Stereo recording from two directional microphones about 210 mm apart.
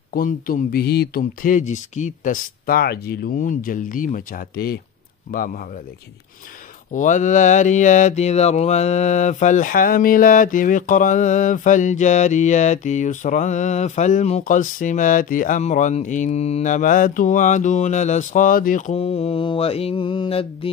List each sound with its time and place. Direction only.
0.1 s mantra: 40° left (ahead or behind)
6.9 s mantra: 35° left (ahead or behind)